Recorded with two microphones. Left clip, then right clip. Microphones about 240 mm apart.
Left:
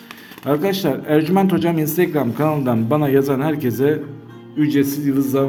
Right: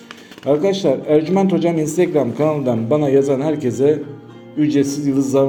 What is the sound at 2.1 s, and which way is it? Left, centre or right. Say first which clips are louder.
Speech: right 2 dB; left.